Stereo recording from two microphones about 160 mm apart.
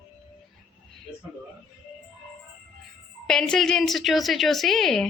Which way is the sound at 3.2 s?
5° left (ahead or behind).